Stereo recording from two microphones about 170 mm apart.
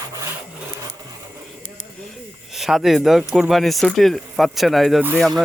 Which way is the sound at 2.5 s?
Centre (ahead or behind).